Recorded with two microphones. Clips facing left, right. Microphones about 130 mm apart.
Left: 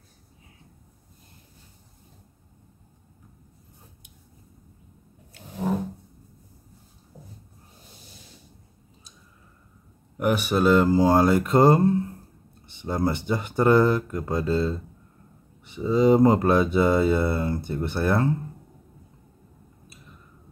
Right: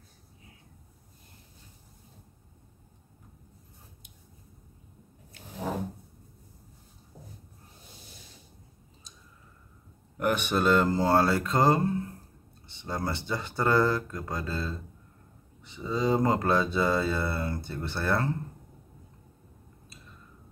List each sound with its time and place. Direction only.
10.1 s speech: 10° left (ahead or behind)
12.8 s speech: 20° left (ahead or behind)